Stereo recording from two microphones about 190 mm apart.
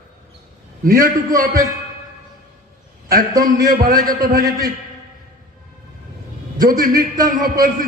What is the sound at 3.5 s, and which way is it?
Speech, 50° right (ahead or behind).